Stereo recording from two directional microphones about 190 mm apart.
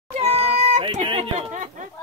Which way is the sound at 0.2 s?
35° right (ahead or behind).